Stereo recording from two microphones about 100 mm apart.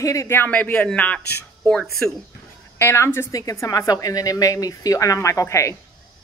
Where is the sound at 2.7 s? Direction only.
25° left (ahead or behind).